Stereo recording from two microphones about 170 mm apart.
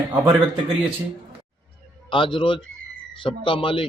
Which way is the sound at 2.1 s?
30° left (ahead or behind).